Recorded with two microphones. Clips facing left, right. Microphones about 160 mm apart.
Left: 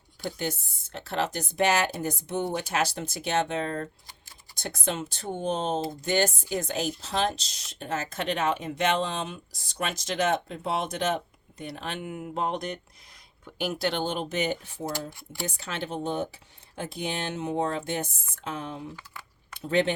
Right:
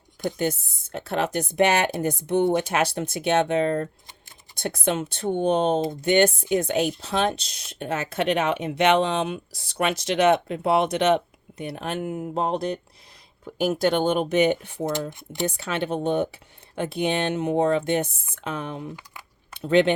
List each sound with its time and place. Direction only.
0.3 s a woman's voice: 50° right (ahead or behind); by 12.8 s 35° right (ahead or behind)
13.4 s speech: 45° right (ahead or behind); by 19.9 s 70° right (ahead or behind)